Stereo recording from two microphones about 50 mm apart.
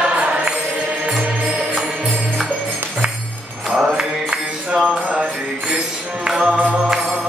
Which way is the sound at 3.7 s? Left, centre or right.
Centre.